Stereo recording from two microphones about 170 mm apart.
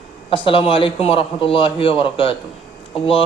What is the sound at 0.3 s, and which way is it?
A man's voice, 30° left (ahead or behind).